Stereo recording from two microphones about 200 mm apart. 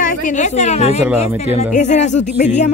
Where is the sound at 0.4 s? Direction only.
35° left (ahead or behind).